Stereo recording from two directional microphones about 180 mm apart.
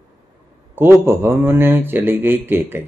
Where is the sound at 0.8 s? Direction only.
10° right (ahead or behind).